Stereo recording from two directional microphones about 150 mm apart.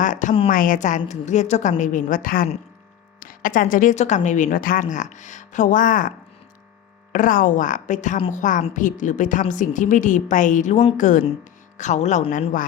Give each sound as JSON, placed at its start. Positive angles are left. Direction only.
{"t": 0.0, "sound": "speech", "side_deg": 55}